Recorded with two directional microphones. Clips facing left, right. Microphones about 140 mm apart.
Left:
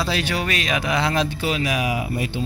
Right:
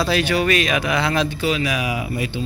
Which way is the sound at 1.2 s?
45° left (ahead or behind).